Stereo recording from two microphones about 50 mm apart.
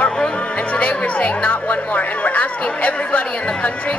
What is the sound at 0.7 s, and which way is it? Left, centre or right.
A woman's voice, left.